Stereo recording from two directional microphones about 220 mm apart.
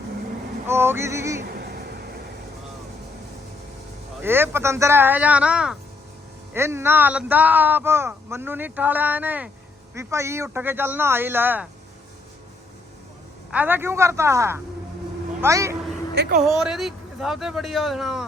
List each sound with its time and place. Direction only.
0.7 s a man's voice: 10° right (ahead or behind)
1.5 s a sound: 45° right (ahead or behind)
4.2 s a man's voice: 10° right (ahead or behind)
13.5 s a man's voice: 10° right (ahead or behind)
16.1 s speech: 50° right (ahead or behind)
16.5 s speech: centre (ahead or behind)